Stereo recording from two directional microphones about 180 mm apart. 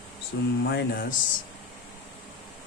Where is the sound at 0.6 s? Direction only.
65° left (ahead or behind).